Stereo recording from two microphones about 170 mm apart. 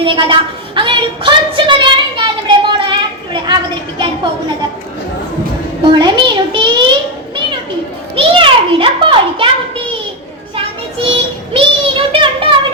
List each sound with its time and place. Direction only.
0.0 s a woman's voice: 30° right (ahead or behind)
0.8 s a sound: 30° right (ahead or behind)
3.9 s a woman's voice: 30° right (ahead or behind)
5.8 s a child's voice: 25° right (ahead or behind)
8.1 s a sound: 30° right (ahead or behind)
11.1 s child singing: 30° right (ahead or behind)